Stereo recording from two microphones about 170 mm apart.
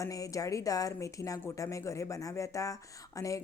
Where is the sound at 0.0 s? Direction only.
20° left (ahead or behind).